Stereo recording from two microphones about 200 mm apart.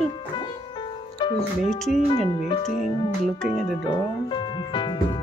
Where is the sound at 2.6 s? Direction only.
35° left (ahead or behind).